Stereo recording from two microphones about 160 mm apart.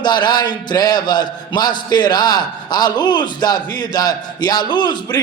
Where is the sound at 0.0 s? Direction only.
25° left (ahead or behind).